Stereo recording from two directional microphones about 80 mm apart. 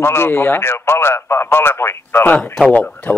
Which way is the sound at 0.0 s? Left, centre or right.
Left.